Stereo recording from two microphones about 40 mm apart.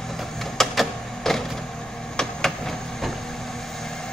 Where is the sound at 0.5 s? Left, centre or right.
Centre.